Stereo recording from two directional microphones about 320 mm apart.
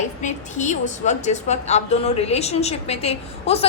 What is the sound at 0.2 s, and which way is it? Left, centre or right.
A woman's voice, left.